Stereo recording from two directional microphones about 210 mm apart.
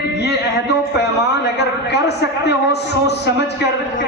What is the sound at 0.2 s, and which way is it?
A man's voice, 55° left (ahead or behind).